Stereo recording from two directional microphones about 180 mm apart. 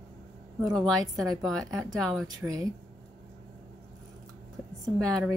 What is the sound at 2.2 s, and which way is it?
Speech, 20° right (ahead or behind).